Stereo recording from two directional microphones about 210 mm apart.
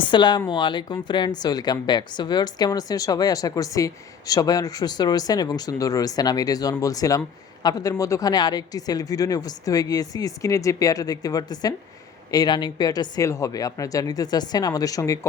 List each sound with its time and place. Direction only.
0.0 s speech: 20° left (ahead or behind)